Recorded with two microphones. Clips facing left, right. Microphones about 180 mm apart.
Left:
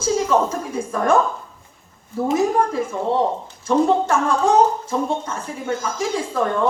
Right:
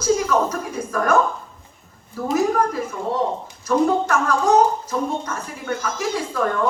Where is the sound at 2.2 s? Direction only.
30° left (ahead or behind).